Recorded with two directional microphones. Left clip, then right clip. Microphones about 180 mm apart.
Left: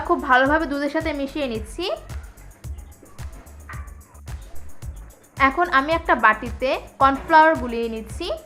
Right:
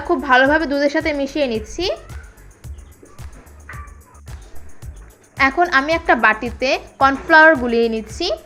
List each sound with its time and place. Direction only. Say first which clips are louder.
0.1 s a woman's voice: right 4 dB; 10° right (ahead or behind)
5.4 s a woman's voice: right 3 dB; 15° right (ahead or behind)